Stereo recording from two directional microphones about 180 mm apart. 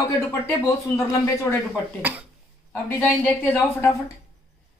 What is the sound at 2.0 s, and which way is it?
Speech, 10° right (ahead or behind).